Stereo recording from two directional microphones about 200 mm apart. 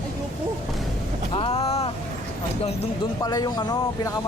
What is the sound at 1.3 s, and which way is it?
Speech, 25° left (ahead or behind).